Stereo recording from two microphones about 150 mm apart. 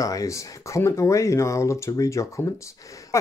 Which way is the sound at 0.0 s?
20° left (ahead or behind).